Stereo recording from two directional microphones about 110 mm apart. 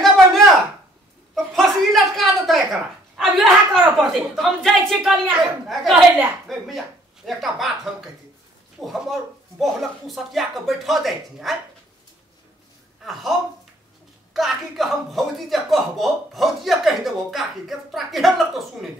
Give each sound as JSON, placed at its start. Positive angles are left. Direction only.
{"t": 0.0, "sound": "a sound", "side_deg": 0}
{"t": 4.0, "sound": "speech", "side_deg": 0}
{"t": 13.0, "sound": "speech", "side_deg": 0}